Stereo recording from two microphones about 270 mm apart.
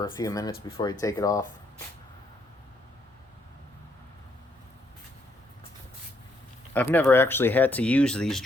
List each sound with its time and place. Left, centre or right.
0.0 s speech: centre
6.7 s speech: centre